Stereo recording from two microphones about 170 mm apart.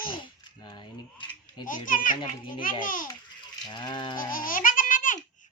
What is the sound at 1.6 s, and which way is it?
Speech, 50° left (ahead or behind).